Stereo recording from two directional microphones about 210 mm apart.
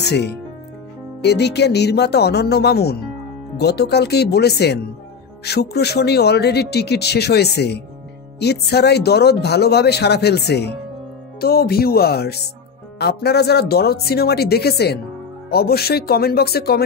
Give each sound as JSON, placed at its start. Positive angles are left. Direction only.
{"t": 0.0, "sound": "speech", "side_deg": 50}